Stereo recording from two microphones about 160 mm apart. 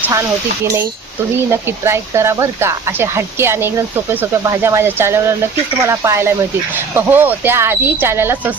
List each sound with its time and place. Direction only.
0.0 s speech: 15° right (ahead or behind)